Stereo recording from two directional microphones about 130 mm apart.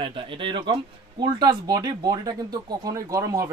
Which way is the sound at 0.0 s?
40° right (ahead or behind).